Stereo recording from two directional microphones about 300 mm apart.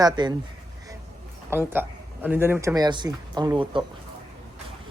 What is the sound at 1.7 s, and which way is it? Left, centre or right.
Speech, centre.